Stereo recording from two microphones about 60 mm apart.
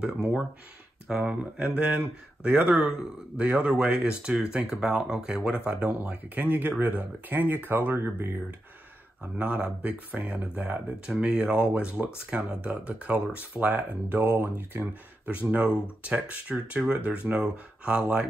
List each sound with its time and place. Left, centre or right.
0.0 s speech: centre
5.9 s speech: right
9.4 s speech: centre
11.1 s speech: centre; by 14.9 s right
15.5 s speech: right